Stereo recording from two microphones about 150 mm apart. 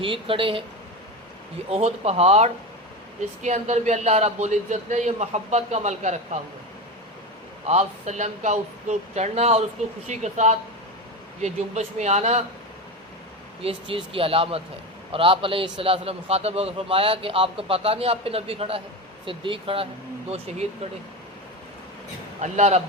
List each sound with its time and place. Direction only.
0.0 s a man's voice: 35° right (ahead or behind)
1.7 s a man's voice: 45° right (ahead or behind)
7.7 s a man's voice: 50° right (ahead or behind)
13.6 s a man's voice: 40° right (ahead or behind)
22.4 s a man's voice: 50° right (ahead or behind)